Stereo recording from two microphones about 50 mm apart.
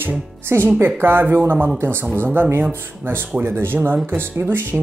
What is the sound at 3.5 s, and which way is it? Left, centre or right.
Speech, right.